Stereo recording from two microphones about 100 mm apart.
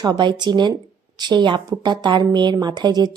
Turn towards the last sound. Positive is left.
turn(degrees=-45)  # may be behind; listen again after turning